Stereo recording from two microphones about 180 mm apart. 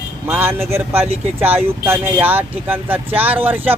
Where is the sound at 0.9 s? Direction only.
35° right (ahead or behind).